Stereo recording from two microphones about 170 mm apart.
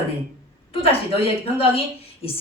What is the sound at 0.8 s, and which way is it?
Speech, 35° left (ahead or behind).